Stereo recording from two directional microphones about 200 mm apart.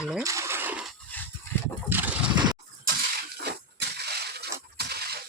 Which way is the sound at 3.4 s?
55° right (ahead or behind).